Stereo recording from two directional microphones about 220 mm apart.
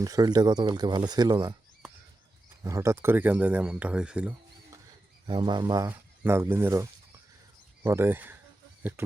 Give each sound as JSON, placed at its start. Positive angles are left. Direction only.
{"t": 0.0, "sound": "speech", "side_deg": -15}
{"t": 2.6, "sound": "speech", "side_deg": -15}
{"t": 5.2, "sound": "speech", "side_deg": -20}
{"t": 7.9, "sound": "speech", "side_deg": -10}